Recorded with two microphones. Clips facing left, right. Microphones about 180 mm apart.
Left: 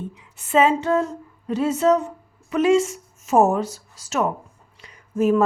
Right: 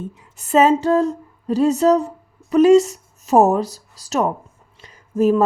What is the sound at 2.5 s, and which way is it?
A woman's voice, 40° right (ahead or behind).